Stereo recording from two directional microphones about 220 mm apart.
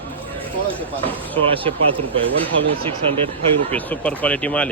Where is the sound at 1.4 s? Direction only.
25° right (ahead or behind).